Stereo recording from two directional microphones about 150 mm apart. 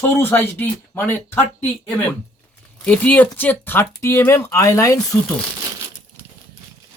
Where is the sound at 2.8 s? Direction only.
10° left (ahead or behind).